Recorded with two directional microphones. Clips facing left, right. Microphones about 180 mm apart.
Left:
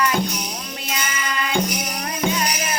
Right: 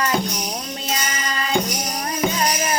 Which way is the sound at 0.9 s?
35° right (ahead or behind).